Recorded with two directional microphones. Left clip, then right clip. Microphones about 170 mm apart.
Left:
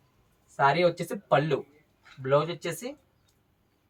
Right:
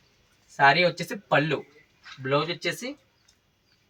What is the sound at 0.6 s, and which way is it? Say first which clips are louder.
Speech: right 3 dB; 30° left (ahead or behind).